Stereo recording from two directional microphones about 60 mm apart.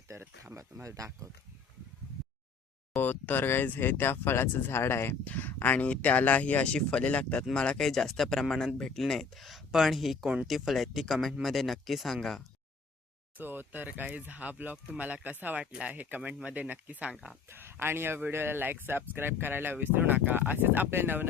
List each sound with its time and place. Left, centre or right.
0.5 s speech: right
2.9 s speech: left
5.2 s speech: left; by 12.4 s centre
13.3 s speech: right
17.5 s speech: right